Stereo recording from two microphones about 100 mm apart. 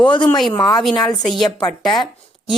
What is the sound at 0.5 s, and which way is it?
Speech, 40° left (ahead or behind).